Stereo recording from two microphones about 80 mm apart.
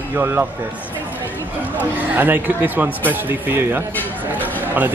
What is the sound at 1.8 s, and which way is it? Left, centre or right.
Speech, right.